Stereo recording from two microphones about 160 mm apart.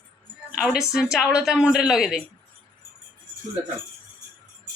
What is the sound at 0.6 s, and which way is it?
A woman's voice, centre (ahead or behind).